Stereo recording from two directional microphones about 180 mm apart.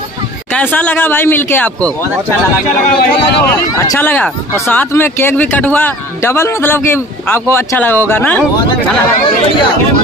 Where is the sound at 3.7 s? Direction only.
15° left (ahead or behind).